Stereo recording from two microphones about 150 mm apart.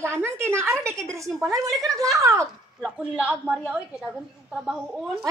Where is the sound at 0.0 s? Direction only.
15° right (ahead or behind).